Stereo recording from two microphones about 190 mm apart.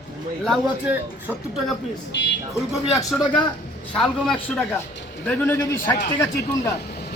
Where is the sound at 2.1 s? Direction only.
65° left (ahead or behind).